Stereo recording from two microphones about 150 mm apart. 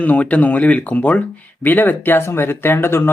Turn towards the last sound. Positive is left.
turn(degrees=15)  # may be behind; listen again after turning